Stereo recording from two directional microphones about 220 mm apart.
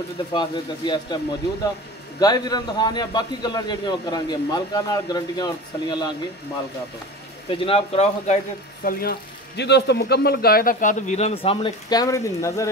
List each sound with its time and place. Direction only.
0.3 s a man's voice: 20° left (ahead or behind)
7.5 s a man's voice: 25° left (ahead or behind)
8.8 s a man's voice: 40° left (ahead or behind); by 12.6 s 15° left (ahead or behind)